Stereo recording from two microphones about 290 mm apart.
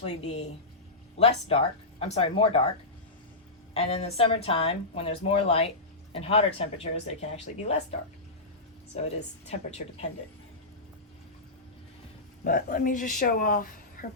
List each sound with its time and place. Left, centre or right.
1.2 s speech: left
3.8 s speech: left
9.0 s speech: left
12.5 s a woman's voice: left